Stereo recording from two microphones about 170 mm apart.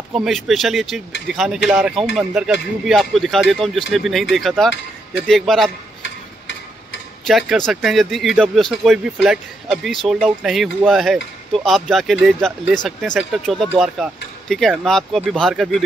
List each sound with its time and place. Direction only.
0.1 s speech: centre (ahead or behind)
6.0 s a sound: 90° left
7.2 s speech: centre (ahead or behind)